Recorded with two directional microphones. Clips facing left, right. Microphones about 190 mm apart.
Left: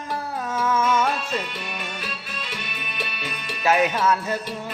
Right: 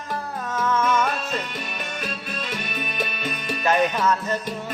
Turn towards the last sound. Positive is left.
turn(degrees=10)  # may be behind; listen again after turning